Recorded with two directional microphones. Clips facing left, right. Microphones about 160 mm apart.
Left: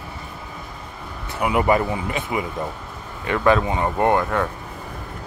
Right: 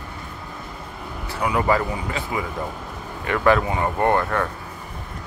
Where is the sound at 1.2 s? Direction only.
20° left (ahead or behind).